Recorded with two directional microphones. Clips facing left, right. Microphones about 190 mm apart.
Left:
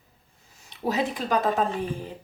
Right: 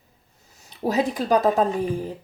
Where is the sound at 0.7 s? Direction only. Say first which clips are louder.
Right 4 dB; 35° right (ahead or behind).